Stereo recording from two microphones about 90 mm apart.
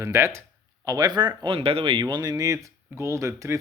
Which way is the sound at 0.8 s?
50° right (ahead or behind).